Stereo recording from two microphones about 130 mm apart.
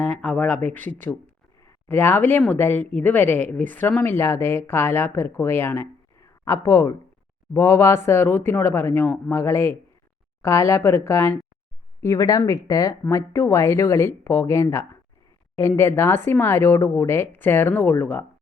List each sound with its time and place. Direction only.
0.0 s speech: 10° left (ahead or behind)